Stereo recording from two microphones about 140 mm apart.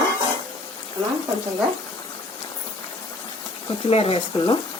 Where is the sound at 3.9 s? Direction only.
45° left (ahead or behind).